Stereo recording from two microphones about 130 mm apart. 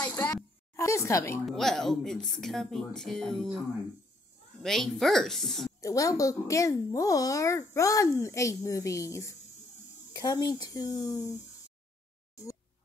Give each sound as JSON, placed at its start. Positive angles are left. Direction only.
{"t": 0.7, "sound": "a child's voice", "side_deg": 20}
{"t": 1.4, "sound": "speech", "side_deg": 5}
{"t": 4.6, "sound": "speech", "side_deg": 0}
{"t": 5.8, "sound": "a child's voice", "side_deg": 25}